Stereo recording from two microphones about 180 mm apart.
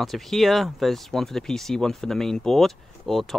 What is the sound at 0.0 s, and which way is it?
Speech, centre (ahead or behind).